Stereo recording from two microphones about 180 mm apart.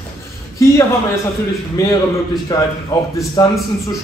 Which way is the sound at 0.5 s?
15° left (ahead or behind).